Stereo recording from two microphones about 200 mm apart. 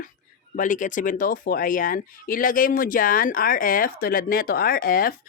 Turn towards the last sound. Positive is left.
turn(degrees=45)  # may be behind; listen again after turning